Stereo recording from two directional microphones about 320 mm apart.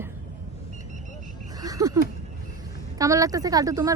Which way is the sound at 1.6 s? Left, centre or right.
Centre.